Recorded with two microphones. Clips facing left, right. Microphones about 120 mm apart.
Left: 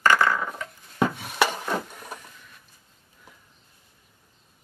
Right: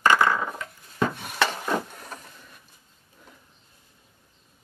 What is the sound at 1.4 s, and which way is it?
Wood, 10° left (ahead or behind).